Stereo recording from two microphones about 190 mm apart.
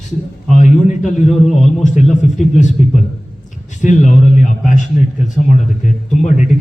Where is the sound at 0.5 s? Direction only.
40° left (ahead or behind).